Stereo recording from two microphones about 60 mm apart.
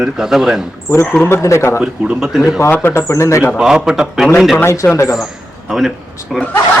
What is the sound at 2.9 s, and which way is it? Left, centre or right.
Speech, left.